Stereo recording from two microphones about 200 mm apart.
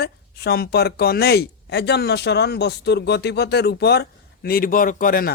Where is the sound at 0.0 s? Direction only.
50° left (ahead or behind).